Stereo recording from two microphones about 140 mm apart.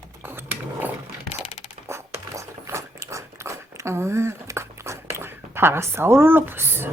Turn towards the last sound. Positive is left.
turn(degrees=-15)  # may be behind; listen again after turning